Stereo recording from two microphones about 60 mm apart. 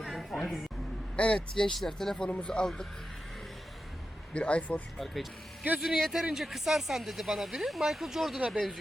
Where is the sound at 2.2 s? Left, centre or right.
Centre.